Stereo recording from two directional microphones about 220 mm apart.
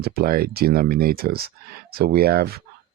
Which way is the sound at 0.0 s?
40° right (ahead or behind).